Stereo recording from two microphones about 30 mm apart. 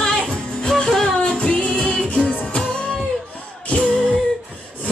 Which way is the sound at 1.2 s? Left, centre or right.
Left.